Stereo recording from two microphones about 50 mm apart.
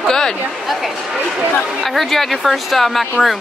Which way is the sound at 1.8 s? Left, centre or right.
Centre.